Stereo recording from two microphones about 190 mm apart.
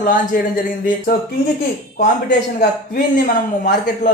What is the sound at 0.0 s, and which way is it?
Speech, 40° left (ahead or behind).